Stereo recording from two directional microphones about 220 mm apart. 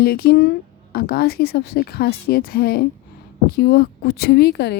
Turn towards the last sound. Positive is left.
turn(degrees=50)  # may be behind; listen again after turning